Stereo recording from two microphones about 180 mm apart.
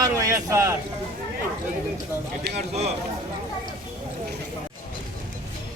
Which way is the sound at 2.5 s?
35° right (ahead or behind).